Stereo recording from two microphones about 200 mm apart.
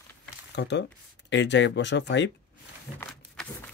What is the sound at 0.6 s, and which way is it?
Speech, 60° left (ahead or behind).